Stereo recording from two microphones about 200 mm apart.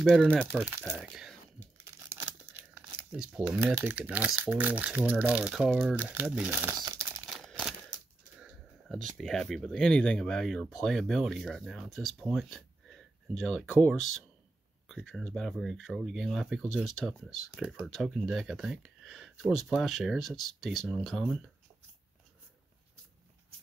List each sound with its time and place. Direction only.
0.0 s speech: centre (ahead or behind)
0.5 s speech: 10° right (ahead or behind)
2.0 s speech: 10° right (ahead or behind)
7.2 s crumpling: centre (ahead or behind)
7.9 s a sound: 20° left (ahead or behind)
8.4 s speech: centre (ahead or behind)